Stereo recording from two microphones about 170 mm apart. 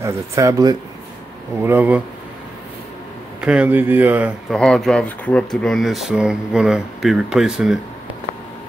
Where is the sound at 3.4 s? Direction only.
5° right (ahead or behind).